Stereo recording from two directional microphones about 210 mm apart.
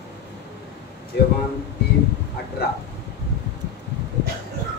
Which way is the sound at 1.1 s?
50° left (ahead or behind).